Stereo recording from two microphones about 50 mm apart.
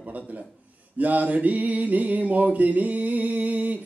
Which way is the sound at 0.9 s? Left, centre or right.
Right.